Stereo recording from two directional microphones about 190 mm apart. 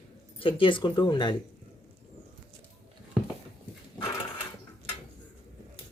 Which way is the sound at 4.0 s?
15° left (ahead or behind).